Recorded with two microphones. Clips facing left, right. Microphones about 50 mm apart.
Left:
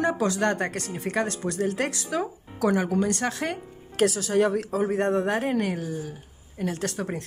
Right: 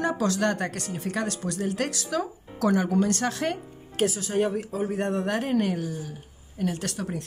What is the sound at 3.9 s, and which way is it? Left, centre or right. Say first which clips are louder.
Speech: left 3 dB; left.